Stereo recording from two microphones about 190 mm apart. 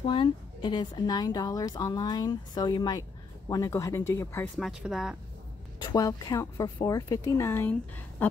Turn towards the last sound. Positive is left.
turn(degrees=10)  # may be behind; listen again after turning